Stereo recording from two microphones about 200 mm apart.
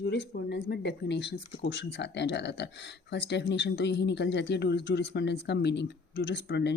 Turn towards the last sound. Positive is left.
turn(degrees=60)  # may be behind; listen again after turning